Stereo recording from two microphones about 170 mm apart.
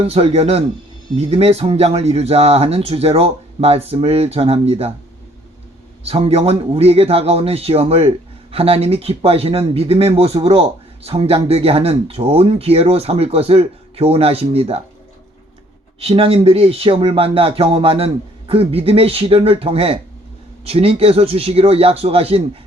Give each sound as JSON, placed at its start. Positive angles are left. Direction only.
{"t": 0.0, "sound": "speech", "side_deg": -35}
{"t": 6.1, "sound": "speech", "side_deg": -35}
{"t": 16.0, "sound": "speech", "side_deg": -35}